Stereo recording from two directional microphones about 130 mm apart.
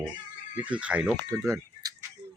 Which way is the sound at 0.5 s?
10° right (ahead or behind).